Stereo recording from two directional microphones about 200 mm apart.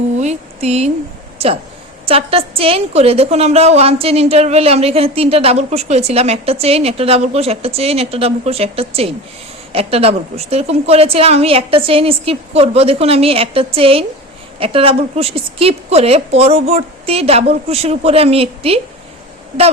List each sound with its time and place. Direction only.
0.2 s a woman's voice: 35° right (ahead or behind)